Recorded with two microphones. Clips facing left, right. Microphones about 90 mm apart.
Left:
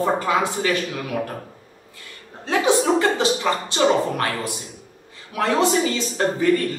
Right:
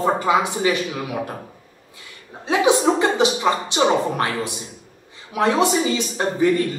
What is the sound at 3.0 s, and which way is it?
A woman's voice, 20° right (ahead or behind).